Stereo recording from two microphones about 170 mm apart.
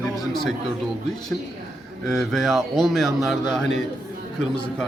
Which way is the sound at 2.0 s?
Centre (ahead or behind).